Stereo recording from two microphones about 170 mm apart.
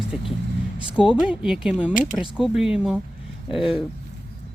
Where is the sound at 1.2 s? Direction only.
5° right (ahead or behind).